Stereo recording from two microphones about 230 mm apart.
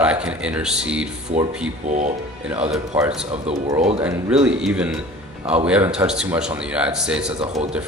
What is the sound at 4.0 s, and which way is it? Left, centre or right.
A man's voice, centre.